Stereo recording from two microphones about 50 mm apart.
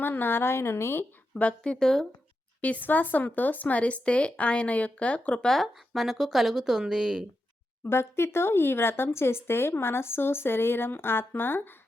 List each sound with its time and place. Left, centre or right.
0.0 s speech: left
1.4 s speech: left
1.8 s a woman's voice: centre
2.6 s speech: left
5.5 s a woman's voice: centre
7.9 s speech: left